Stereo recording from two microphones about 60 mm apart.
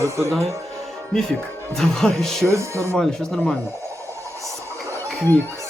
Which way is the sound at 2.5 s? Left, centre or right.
Right.